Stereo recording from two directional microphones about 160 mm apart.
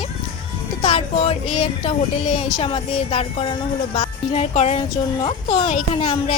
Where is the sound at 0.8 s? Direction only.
40° left (ahead or behind).